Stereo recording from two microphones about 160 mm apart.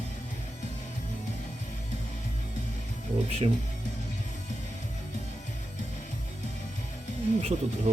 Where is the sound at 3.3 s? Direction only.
40° right (ahead or behind).